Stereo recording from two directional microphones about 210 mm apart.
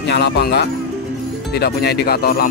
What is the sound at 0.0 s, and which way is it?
Speech, 50° left (ahead or behind).